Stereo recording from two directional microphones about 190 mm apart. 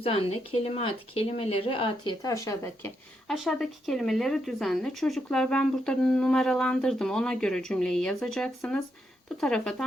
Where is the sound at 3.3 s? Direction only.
Centre (ahead or behind).